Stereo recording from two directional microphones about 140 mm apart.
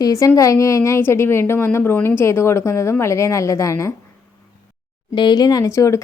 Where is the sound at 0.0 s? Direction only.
25° left (ahead or behind).